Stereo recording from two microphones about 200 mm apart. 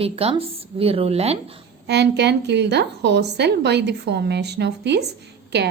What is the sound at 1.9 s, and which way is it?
A woman's voice, 55° right (ahead or behind).